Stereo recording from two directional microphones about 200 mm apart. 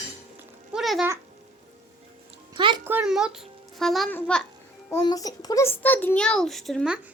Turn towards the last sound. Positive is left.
turn(degrees=0)  # may be behind; listen again after turning